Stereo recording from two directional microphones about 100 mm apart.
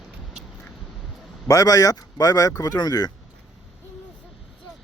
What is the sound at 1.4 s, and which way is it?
Speech, 35° left (ahead or behind).